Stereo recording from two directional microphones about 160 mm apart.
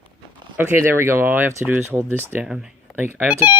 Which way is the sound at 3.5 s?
30° left (ahead or behind).